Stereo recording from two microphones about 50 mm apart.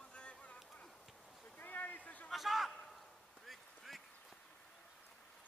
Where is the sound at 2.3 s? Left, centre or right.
Centre.